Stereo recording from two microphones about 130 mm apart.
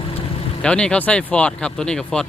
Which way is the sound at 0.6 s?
5° left (ahead or behind).